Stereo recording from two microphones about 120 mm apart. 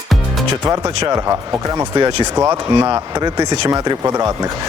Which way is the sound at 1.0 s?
25° right (ahead or behind).